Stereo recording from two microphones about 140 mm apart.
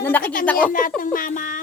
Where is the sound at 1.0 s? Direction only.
85° left.